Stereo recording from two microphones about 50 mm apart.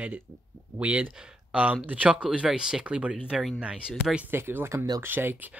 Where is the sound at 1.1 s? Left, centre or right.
Centre.